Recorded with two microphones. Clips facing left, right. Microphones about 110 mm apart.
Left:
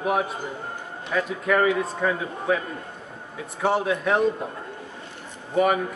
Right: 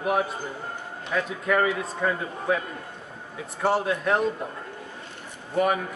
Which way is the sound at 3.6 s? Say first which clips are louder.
Left 1 dB; centre (ahead or behind).